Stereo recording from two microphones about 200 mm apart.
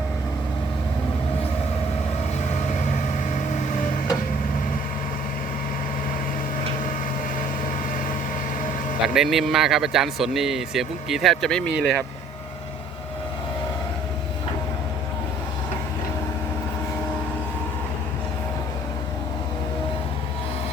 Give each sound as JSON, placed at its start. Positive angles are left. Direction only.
{"t": 2.9, "sound": "vehicle", "side_deg": 40}
{"t": 9.1, "sound": "a man's voice", "side_deg": 0}